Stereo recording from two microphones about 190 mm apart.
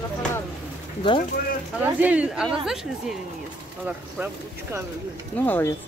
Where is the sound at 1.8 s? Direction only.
10° right (ahead or behind).